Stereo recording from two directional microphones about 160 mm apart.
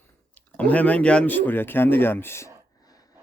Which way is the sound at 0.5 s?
10° left (ahead or behind).